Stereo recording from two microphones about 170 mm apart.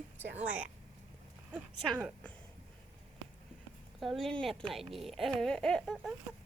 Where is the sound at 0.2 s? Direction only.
10° right (ahead or behind).